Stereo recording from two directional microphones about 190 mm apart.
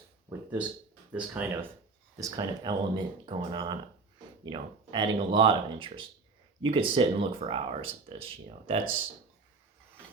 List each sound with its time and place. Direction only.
1.1 s speech: 10° right (ahead or behind); by 8.9 s 30° right (ahead or behind)